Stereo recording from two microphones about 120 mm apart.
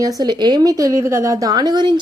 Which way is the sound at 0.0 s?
35° right (ahead or behind).